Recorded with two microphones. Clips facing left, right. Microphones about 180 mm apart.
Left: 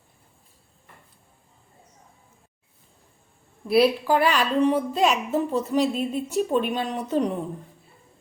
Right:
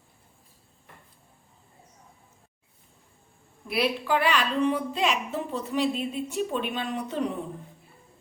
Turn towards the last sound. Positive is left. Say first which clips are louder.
# left 5 dB
turn(degrees=40)  # may be behind; listen again after turning